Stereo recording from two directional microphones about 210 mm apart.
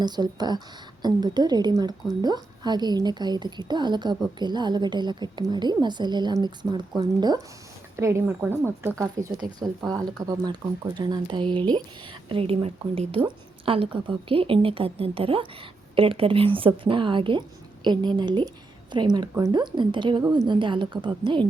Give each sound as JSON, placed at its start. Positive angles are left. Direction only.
{"t": 0.0, "sound": "a woman's voice", "side_deg": -20}